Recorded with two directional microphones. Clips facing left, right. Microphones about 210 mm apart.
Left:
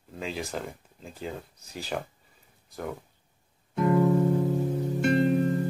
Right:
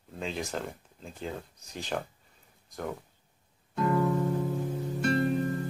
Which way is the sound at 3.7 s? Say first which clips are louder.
Left 4 dB; 20° left (ahead or behind).